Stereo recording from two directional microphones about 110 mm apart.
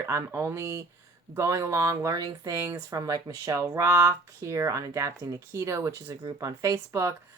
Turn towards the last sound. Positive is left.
turn(degrees=-30)  # may be behind; listen again after turning